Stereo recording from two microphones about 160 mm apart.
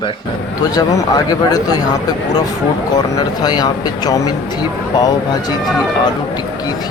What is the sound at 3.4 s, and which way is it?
Speech, 25° left (ahead or behind).